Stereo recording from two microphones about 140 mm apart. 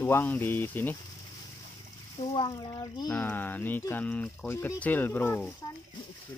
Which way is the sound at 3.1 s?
10° left (ahead or behind).